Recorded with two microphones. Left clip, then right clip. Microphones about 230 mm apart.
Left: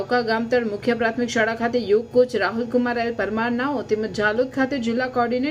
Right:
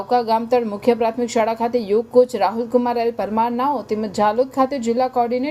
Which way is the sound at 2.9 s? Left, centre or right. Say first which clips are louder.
Right 3 dB; centre.